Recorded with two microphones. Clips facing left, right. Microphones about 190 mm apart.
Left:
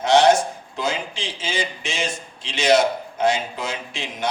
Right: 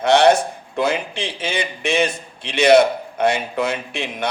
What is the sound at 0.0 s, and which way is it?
A man's voice, 60° right (ahead or behind).